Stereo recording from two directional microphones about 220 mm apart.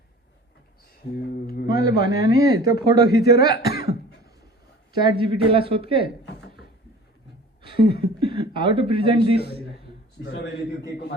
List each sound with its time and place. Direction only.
1.0 s speech: 45° left (ahead or behind)
4.9 s speech: 20° right (ahead or behind)
6.2 s a sound: 50° left (ahead or behind)
7.7 s a sound: 20° right (ahead or behind)
8.0 s speech: 20° right (ahead or behind)
9.1 s speech: 45° left (ahead or behind)